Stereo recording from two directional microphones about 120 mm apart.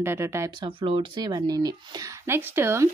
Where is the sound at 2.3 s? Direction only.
20° right (ahead or behind).